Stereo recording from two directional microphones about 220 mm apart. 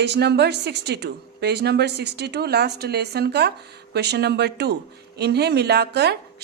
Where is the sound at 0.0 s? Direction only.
50° right (ahead or behind).